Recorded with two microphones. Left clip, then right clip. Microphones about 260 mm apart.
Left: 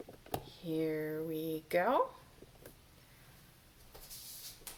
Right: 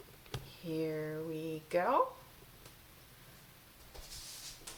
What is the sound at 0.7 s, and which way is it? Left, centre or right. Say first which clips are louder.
Speech: left 2 dB; centre.